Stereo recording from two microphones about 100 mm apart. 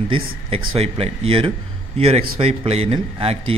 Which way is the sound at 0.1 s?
75° right (ahead or behind).